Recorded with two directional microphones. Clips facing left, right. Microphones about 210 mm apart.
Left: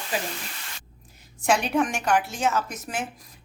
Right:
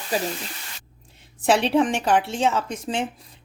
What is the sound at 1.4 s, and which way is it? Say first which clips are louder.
A woman's voice: right 4 dB; 30° right (ahead or behind).